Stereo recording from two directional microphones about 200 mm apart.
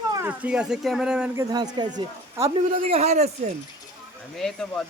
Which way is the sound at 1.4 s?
20° right (ahead or behind).